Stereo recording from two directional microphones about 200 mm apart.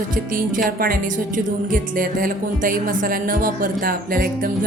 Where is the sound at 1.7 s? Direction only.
45° right (ahead or behind).